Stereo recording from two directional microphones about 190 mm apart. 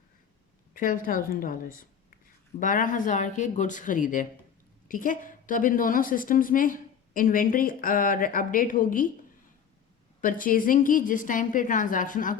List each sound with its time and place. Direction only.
0.7 s a woman's voice: 45° left (ahead or behind)
10.2 s a woman's voice: 45° left (ahead or behind)